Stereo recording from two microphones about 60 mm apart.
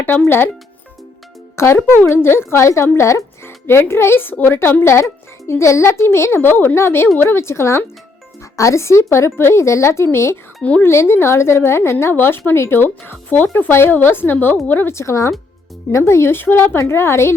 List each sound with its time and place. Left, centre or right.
0.3 s a woman's voice: left
1.5 s a woman's voice: left
10.6 s speech: left
10.8 s a woman's voice: left
12.1 s speech: left
14.9 s a woman's voice: left